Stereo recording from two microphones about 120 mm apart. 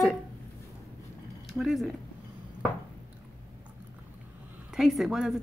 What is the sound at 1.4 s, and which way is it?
Speech, centre (ahead or behind).